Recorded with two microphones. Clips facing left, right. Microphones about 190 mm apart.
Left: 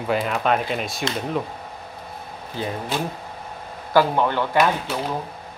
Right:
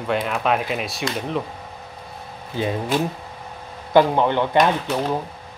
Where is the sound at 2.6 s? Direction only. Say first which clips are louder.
Right 4 dB; 15° right (ahead or behind).